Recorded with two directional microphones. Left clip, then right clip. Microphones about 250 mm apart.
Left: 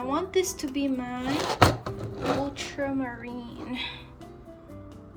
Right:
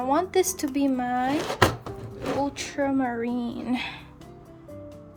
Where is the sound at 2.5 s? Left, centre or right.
Right.